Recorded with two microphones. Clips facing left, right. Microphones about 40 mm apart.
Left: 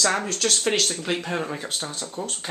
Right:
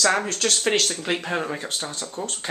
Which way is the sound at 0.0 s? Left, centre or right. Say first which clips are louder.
Right 2 dB; centre.